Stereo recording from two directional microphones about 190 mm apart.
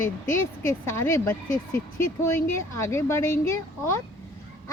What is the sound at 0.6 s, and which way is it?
Speech, 15° left (ahead or behind).